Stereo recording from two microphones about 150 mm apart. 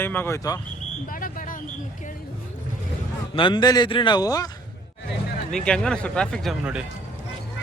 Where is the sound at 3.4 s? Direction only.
30° left (ahead or behind).